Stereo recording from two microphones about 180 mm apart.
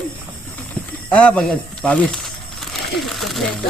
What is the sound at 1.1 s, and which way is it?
Speech, 10° left (ahead or behind).